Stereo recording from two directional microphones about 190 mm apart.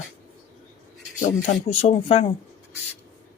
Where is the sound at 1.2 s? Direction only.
35° left (ahead or behind).